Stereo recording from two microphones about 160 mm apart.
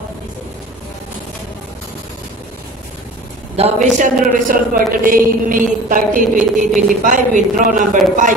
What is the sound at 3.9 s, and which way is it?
A man's voice, 55° right (ahead or behind).